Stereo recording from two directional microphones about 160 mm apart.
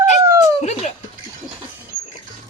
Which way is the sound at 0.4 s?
45° left (ahead or behind).